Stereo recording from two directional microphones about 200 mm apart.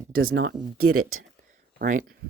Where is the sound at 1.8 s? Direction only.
45° right (ahead or behind).